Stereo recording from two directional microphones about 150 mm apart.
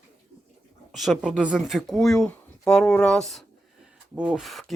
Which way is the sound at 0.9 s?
Centre (ahead or behind).